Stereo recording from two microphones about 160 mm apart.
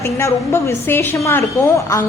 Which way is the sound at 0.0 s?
15° left (ahead or behind).